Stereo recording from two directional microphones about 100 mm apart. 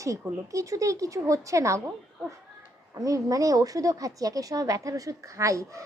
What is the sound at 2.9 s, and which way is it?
A woman's voice, 35° right (ahead or behind).